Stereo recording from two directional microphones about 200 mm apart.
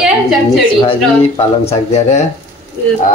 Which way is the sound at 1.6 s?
35° left (ahead or behind).